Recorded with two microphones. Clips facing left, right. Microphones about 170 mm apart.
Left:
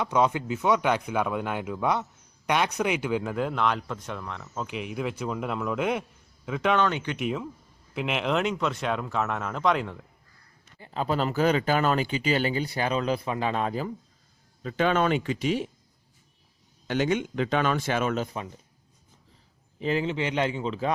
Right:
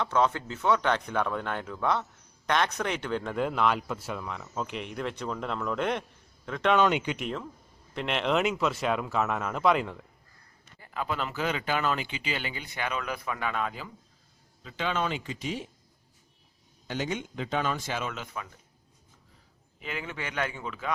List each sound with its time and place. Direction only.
0.0 s speech: 15° left (ahead or behind)
6.7 s speech: 15° right (ahead or behind)
7.2 s speech: 5° left (ahead or behind)
10.8 s speech: 25° left (ahead or behind)
14.6 s speech: 55° left (ahead or behind); by 15.6 s 70° left (ahead or behind)
16.8 s a man's voice: 70° left (ahead or behind); by 18.3 s 40° left (ahead or behind)
19.8 s speech: 35° left (ahead or behind)
20.1 s a man's voice: 20° left (ahead or behind)